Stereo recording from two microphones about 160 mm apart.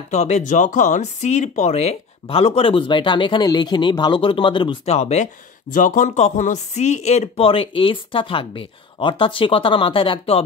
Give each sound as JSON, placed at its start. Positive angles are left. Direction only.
{"t": 0.1, "sound": "speech", "side_deg": 45}
{"t": 4.9, "sound": "speech", "side_deg": 45}